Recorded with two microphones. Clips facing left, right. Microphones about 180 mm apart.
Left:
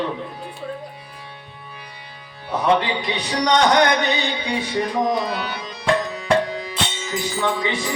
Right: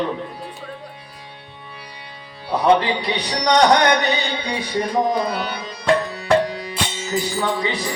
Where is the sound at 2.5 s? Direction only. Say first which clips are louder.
Right 3 dB; 35° right (ahead or behind).